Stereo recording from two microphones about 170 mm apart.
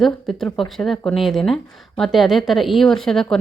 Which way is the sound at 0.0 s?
Centre (ahead or behind).